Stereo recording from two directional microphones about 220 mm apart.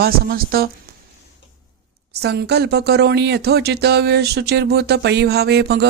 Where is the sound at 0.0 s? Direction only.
45° right (ahead or behind).